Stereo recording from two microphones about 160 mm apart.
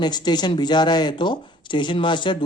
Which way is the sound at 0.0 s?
25° left (ahead or behind).